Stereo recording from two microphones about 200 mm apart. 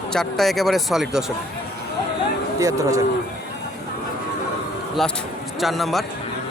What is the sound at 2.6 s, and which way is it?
Speech, 15° right (ahead or behind).